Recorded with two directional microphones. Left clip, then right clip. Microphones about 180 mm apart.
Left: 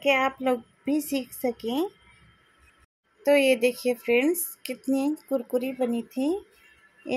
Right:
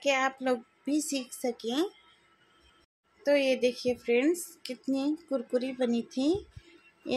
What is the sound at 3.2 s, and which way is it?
A woman's voice, 20° left (ahead or behind).